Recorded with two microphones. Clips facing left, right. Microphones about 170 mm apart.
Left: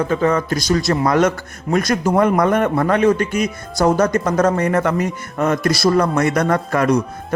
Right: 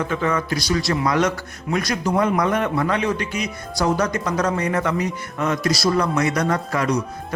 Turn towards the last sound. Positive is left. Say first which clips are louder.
# left 5 dB
turn(degrees=55)  # may be behind; listen again after turning